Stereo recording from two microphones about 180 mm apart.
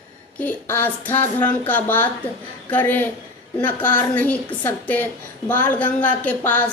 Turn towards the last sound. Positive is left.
turn(degrees=10)  # may be behind; listen again after turning